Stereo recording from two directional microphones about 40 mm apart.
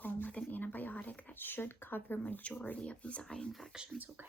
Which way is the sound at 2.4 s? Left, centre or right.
Left.